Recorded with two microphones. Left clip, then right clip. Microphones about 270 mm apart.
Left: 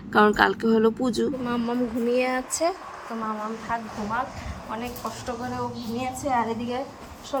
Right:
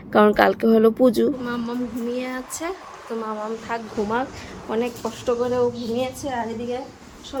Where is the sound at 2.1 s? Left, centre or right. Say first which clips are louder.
Left 7 dB; centre.